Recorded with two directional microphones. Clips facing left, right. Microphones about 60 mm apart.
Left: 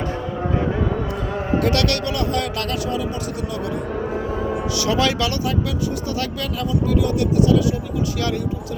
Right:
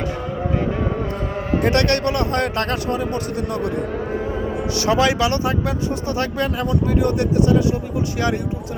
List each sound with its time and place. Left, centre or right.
1.4 s a man's voice: right
4.8 s a man's voice: right